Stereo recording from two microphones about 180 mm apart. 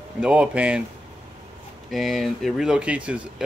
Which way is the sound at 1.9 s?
Centre (ahead or behind).